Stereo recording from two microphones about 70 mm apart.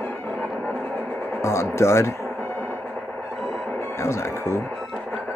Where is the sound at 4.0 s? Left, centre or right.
Left.